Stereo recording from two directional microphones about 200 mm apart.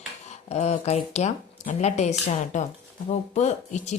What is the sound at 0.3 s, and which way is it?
Speech, 30° left (ahead or behind).